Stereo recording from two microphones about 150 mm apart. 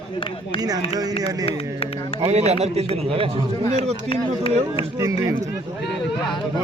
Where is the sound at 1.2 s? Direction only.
40° left (ahead or behind).